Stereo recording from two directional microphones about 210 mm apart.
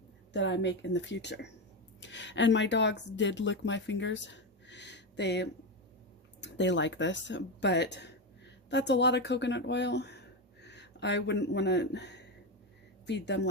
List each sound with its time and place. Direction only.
0.3 s a woman's voice: 60° left (ahead or behind)